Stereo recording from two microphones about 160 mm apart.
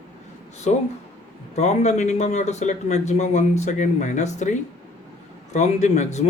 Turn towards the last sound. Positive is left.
turn(degrees=45)  # may be behind; listen again after turning